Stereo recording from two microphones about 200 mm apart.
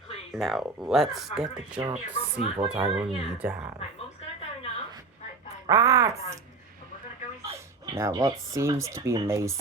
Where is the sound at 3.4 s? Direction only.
10° right (ahead or behind).